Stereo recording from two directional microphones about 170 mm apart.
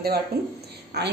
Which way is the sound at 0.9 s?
75° right (ahead or behind).